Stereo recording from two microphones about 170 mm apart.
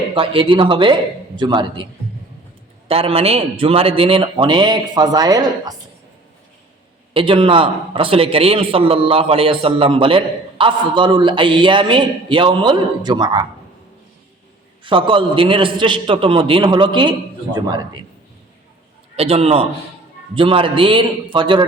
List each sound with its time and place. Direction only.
0.1 s a man's voice: 30° right (ahead or behind)
2.9 s a man's voice: 35° right (ahead or behind)
7.1 s a man's voice: 30° right (ahead or behind)
14.8 s a man's voice: 30° right (ahead or behind)
19.1 s a man's voice: 35° right (ahead or behind)